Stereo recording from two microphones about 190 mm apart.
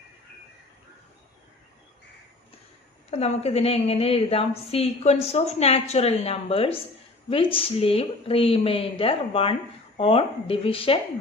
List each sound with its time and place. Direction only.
3.1 s a woman's voice: 35° left (ahead or behind)